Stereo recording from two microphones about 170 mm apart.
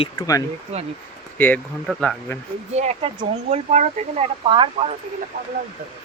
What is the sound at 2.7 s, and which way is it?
Speech, 40° right (ahead or behind).